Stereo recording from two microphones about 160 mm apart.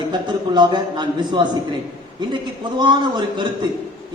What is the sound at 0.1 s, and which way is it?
Speech, 30° right (ahead or behind).